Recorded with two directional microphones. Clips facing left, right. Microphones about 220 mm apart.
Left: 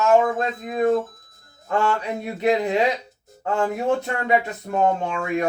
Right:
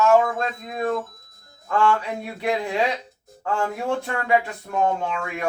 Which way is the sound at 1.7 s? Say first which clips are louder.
Right 1 dB; 20° left (ahead or behind).